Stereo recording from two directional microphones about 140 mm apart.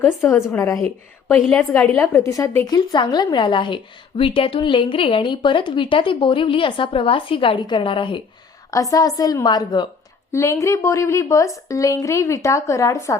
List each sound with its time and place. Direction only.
0.3 s a woman's voice: 20° left (ahead or behind); by 8.2 s 35° left (ahead or behind)
8.7 s a woman's voice: 25° left (ahead or behind)